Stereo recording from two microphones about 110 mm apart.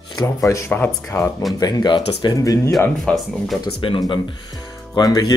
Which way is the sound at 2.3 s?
30° left (ahead or behind).